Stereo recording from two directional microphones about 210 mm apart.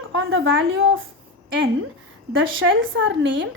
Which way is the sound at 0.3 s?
70° right (ahead or behind).